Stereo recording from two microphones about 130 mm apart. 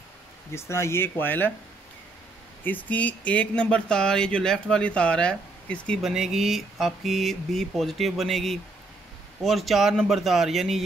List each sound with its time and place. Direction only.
0.5 s speech: 20° left (ahead or behind)
2.6 s speech: 15° left (ahead or behind)
6.1 s speech: 5° right (ahead or behind)